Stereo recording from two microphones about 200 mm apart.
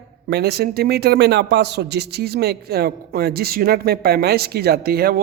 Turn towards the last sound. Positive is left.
turn(degrees=-50)  # may be behind; listen again after turning